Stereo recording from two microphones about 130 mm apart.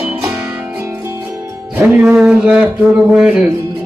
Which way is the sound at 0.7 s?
20° right (ahead or behind).